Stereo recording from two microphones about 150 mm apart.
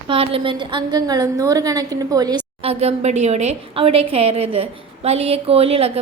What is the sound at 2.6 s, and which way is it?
A woman's voice, 45° right (ahead or behind).